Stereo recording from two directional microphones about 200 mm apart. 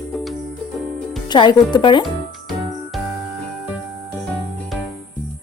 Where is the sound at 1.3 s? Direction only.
20° left (ahead or behind).